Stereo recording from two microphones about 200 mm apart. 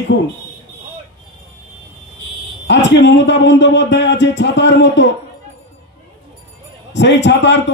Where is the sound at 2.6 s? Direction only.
65° left (ahead or behind).